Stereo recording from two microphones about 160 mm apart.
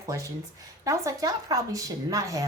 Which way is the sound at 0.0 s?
20° right (ahead or behind).